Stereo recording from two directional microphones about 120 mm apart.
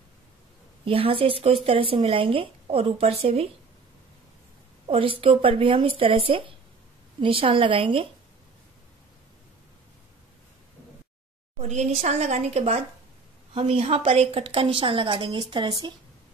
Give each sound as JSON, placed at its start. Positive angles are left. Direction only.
{"t": 0.8, "sound": "speech", "side_deg": -50}
{"t": 4.8, "sound": "speech", "side_deg": -50}
{"t": 11.5, "sound": "a woman's voice", "side_deg": -70}
{"t": 13.6, "sound": "a woman's voice", "side_deg": -55}